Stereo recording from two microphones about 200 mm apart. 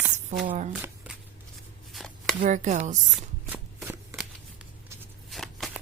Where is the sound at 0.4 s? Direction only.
35° right (ahead or behind).